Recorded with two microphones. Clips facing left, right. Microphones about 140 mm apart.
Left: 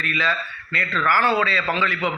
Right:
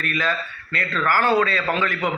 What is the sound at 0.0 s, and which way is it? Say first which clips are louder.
A man's voice: right 1 dB; 45° right (ahead or behind).